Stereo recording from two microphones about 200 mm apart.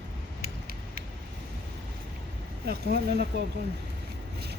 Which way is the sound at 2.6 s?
50° right (ahead or behind).